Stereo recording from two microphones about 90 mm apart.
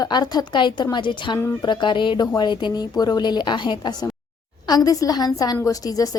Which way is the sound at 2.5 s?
60° left (ahead or behind).